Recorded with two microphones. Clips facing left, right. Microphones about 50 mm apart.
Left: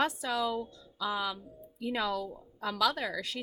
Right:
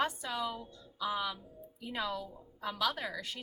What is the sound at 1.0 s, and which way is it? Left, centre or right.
Music, left.